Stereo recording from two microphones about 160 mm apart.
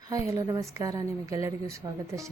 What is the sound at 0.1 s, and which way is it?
A woman's voice, 20° right (ahead or behind).